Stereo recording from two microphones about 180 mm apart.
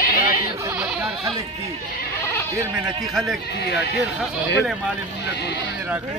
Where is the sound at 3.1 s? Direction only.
Centre (ahead or behind).